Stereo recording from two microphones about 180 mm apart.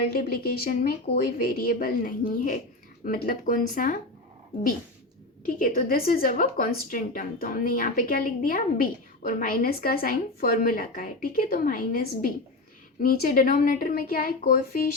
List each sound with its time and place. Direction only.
0.1 s a woman's voice: 55° left (ahead or behind)
5.5 s a woman's voice: 50° left (ahead or behind)